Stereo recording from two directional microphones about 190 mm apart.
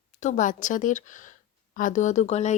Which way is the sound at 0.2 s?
40° left (ahead or behind).